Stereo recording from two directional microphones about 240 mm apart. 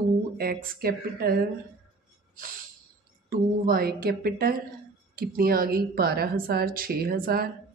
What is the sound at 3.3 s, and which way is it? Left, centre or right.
Speech, right.